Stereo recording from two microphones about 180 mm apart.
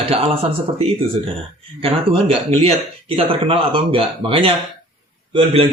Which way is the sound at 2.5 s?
35° right (ahead or behind).